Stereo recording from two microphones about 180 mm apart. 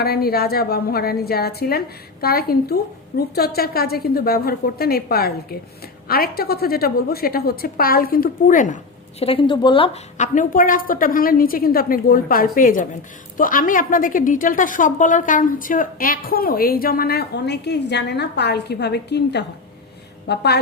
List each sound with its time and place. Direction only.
0.0 s a woman's voice: 60° left (ahead or behind)